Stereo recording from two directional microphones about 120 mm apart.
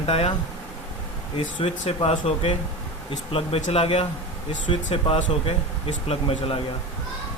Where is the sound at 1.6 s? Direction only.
55° left (ahead or behind).